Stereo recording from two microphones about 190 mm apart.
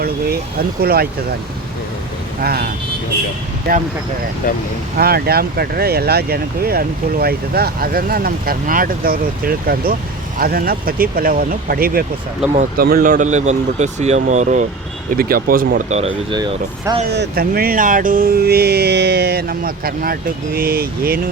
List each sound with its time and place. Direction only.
0.8 s speech: 55° right (ahead or behind)
2.4 s speech: 55° right (ahead or behind)
3.7 s speech: 55° right (ahead or behind)
4.4 s speech: 50° left (ahead or behind)
4.9 s speech: 55° right (ahead or behind); by 14.7 s 40° right (ahead or behind)
15.1 s speech: 50° right (ahead or behind)
15.9 s speech: 30° right (ahead or behind)
17.1 s speech: 55° right (ahead or behind)